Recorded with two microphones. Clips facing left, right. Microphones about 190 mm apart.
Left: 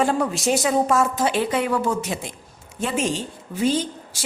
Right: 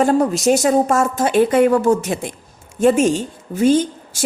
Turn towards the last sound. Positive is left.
turn(degrees=-50)  # may be behind; listen again after turning